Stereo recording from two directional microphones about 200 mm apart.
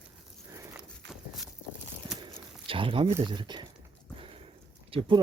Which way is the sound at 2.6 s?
25° right (ahead or behind).